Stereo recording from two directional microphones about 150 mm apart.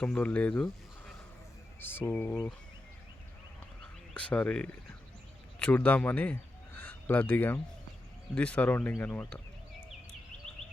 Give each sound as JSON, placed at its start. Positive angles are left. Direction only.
{"t": 0.0, "sound": "speech", "side_deg": 5}
{"t": 4.1, "sound": "speech", "side_deg": 10}
{"t": 10.4, "sound": "a sound", "side_deg": 5}